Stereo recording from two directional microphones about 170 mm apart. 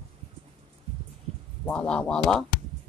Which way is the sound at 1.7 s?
5° left (ahead or behind).